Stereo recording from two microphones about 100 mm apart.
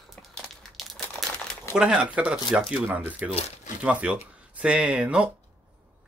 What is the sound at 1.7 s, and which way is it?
Speech, 10° right (ahead or behind).